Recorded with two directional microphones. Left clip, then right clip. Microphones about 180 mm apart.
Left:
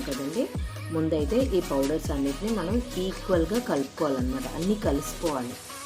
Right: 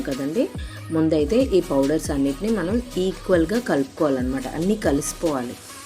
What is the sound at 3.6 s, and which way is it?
Speech, 25° right (ahead or behind).